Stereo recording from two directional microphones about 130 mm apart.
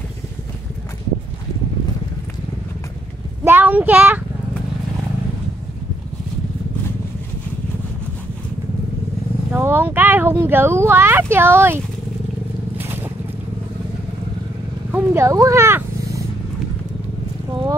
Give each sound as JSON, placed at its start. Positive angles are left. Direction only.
{"t": 3.4, "sound": "a sound", "side_deg": -15}
{"t": 9.5, "sound": "speech", "side_deg": -15}
{"t": 14.9, "sound": "horse", "side_deg": -15}
{"t": 15.2, "sound": "speech", "side_deg": -25}